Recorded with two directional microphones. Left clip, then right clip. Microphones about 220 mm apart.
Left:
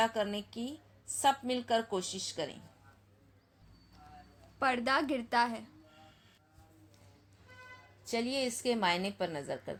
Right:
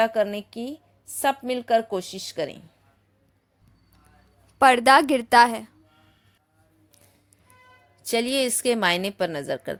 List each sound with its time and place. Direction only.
0.0 s a woman's voice: 50° right (ahead or behind)
4.6 s a woman's voice: 50° right (ahead or behind)
8.0 s a woman's voice: 50° right (ahead or behind)